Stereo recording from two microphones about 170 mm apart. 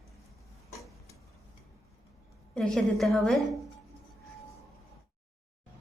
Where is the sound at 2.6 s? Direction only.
Centre (ahead or behind).